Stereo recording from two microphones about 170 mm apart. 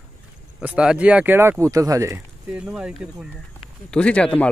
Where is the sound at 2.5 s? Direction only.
5° right (ahead or behind).